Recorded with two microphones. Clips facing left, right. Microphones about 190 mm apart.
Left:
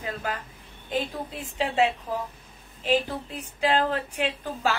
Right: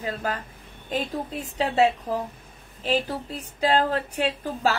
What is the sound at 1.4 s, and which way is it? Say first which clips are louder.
A woman's voice: right 2 dB; 40° right (ahead or behind).